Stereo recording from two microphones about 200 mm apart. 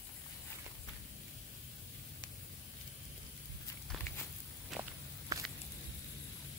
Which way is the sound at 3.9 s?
10° left (ahead or behind).